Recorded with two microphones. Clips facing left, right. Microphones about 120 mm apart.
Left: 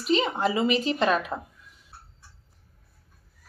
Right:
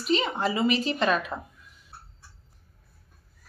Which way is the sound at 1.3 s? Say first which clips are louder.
Left 2 dB; 5° left (ahead or behind).